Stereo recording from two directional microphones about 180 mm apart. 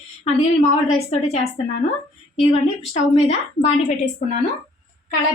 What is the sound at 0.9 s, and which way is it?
Speech, 35° left (ahead or behind).